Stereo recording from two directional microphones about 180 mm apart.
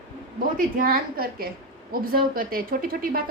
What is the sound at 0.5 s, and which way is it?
A woman's voice, 50° right (ahead or behind).